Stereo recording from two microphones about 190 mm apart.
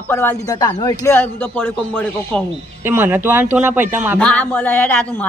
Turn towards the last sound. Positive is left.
turn(degrees=10)  # may be behind; listen again after turning